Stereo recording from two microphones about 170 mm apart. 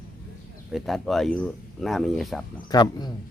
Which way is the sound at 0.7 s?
Centre (ahead or behind).